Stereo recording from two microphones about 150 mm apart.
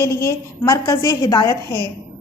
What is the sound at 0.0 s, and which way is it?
A woman's voice, 20° left (ahead or behind).